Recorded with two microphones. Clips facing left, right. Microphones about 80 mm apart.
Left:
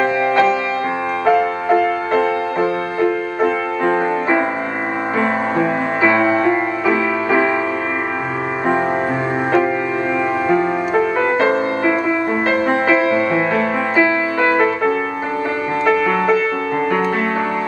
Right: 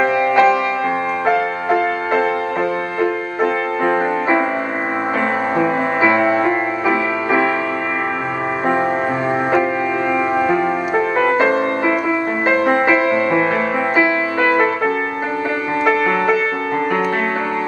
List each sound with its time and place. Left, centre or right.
0.0 s music: centre
3.8 s music: centre
6.0 s music: centre
10.1 s music: centre
13.3 s music: right
13.9 s music: centre
15.8 s music: centre